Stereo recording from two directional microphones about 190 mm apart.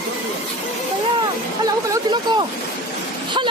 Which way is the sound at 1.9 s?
25° right (ahead or behind).